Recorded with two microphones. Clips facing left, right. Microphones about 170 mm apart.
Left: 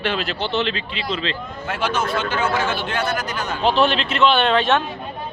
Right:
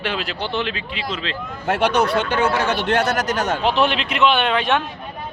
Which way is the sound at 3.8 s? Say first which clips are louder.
Even; 15° right (ahead or behind).